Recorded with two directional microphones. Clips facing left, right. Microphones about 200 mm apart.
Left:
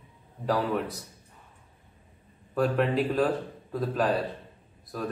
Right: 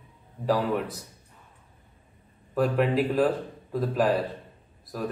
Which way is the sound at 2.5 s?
5° right (ahead or behind).